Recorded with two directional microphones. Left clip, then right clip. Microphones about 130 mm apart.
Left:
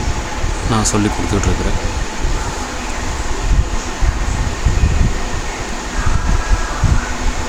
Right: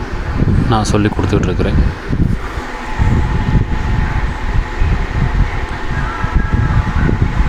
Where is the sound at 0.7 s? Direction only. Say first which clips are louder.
Right 1 dB; 30° right (ahead or behind).